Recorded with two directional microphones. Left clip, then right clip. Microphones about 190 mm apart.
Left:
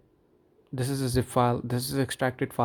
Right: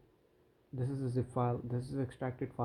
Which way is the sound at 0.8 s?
45° left (ahead or behind).